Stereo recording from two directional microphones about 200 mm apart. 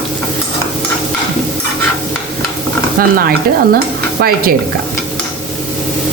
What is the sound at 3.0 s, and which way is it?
Speech, 45° right (ahead or behind).